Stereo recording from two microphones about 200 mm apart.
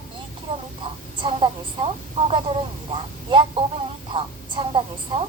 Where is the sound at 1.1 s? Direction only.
25° right (ahead or behind).